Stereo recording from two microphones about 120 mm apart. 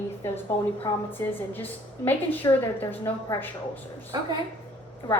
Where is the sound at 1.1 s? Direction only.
15° left (ahead or behind).